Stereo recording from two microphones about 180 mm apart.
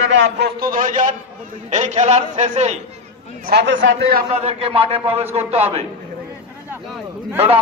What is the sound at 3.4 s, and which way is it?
Speech, 75° right (ahead or behind).